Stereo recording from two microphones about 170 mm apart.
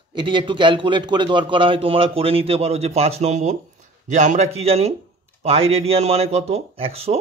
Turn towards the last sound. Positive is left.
turn(degrees=-35)  # may be behind; listen again after turning